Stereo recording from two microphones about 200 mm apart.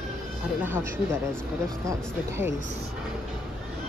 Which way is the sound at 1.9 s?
10° right (ahead or behind).